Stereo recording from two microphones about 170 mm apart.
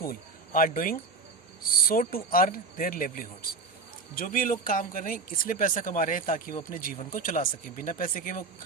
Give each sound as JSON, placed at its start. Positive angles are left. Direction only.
{"t": 0.0, "sound": "speech", "side_deg": 60}